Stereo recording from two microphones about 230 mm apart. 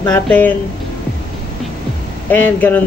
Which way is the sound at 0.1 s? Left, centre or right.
Centre.